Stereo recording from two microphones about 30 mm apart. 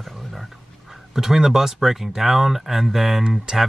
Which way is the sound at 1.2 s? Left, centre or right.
Centre.